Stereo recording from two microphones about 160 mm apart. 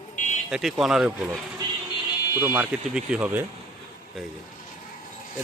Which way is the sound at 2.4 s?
15° right (ahead or behind).